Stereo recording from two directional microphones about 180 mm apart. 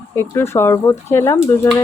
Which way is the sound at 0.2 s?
15° left (ahead or behind).